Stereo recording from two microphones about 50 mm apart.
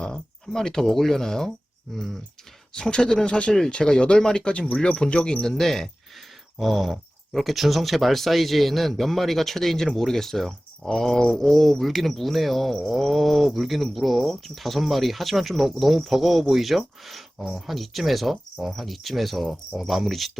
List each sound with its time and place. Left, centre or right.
0.0 s speech: centre
2.7 s speech: centre
3.5 s speech: centre